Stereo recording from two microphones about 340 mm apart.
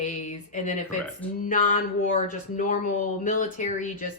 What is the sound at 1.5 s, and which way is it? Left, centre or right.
Speech, left.